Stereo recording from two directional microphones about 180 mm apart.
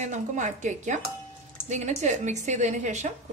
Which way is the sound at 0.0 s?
40° right (ahead or behind).